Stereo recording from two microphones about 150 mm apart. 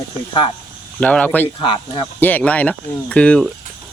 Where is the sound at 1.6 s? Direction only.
35° left (ahead or behind).